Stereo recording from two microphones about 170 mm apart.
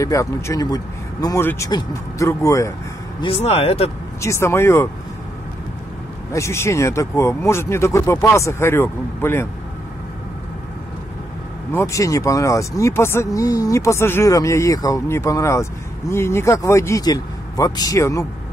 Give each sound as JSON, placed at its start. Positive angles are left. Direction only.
{"t": 0.0, "sound": "a man's voice", "side_deg": 20}
{"t": 3.2, "sound": "speech", "side_deg": 35}
{"t": 4.2, "sound": "speech", "side_deg": 15}
{"t": 6.3, "sound": "speech", "side_deg": 15}
{"t": 11.7, "sound": "speech", "side_deg": 20}